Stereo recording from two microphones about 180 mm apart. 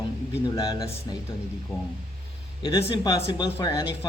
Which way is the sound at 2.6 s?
25° left (ahead or behind).